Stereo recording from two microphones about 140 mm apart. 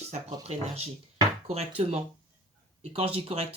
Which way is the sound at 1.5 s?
45° right (ahead or behind).